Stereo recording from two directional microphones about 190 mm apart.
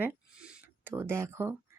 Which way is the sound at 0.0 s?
10° right (ahead or behind).